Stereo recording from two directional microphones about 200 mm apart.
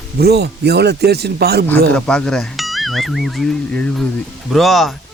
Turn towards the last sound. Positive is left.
turn(degrees=0)  # may be behind; listen again after turning